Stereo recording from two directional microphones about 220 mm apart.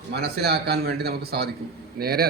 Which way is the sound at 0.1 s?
50° right (ahead or behind).